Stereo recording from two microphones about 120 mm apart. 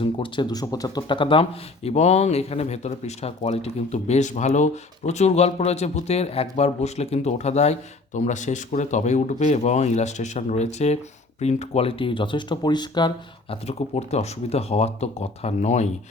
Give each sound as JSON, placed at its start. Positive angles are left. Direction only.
{"t": 0.0, "sound": "speech", "side_deg": 45}
{"t": 13.7, "sound": "speech", "side_deg": 65}